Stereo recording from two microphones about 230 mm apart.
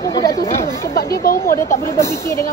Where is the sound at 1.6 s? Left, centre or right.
Centre.